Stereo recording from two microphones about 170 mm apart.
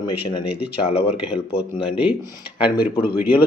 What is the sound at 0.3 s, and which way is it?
Speech, 30° left (ahead or behind).